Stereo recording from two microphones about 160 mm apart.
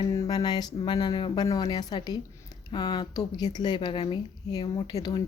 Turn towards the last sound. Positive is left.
turn(degrees=25)  # may be behind; listen again after turning